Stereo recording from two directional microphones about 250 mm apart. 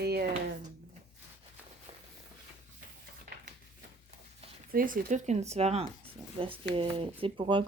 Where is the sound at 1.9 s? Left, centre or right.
Right.